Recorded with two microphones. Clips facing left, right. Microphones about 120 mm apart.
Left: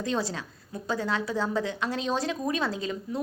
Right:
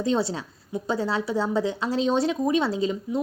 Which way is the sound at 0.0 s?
25° right (ahead or behind).